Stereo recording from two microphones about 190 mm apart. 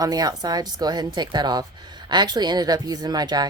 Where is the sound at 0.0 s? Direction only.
20° right (ahead or behind).